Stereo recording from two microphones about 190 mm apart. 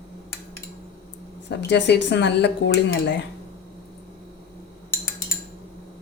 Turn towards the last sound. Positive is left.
turn(degrees=10)  # may be behind; listen again after turning